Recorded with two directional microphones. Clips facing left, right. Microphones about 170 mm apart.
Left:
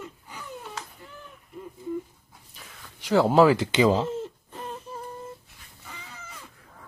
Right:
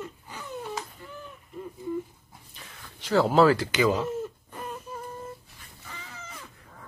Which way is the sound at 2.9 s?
15° left (ahead or behind).